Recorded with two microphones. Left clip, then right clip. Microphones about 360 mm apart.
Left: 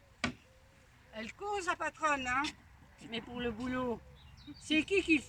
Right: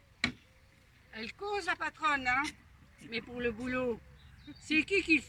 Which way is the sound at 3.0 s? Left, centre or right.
Left.